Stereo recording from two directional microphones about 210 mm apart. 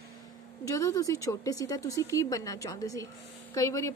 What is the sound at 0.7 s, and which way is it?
A woman's voice, 15° left (ahead or behind).